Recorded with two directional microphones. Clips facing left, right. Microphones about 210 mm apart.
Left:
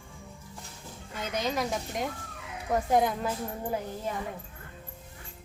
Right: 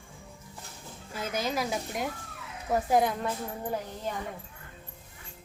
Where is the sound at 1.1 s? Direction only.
5° right (ahead or behind).